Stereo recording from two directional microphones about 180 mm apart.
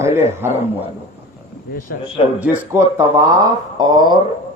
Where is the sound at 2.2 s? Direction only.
30° left (ahead or behind).